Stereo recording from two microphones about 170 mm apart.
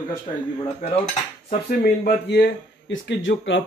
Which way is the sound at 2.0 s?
80° left.